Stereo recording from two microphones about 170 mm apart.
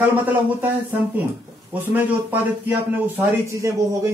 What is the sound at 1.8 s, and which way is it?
Speech, 10° right (ahead or behind).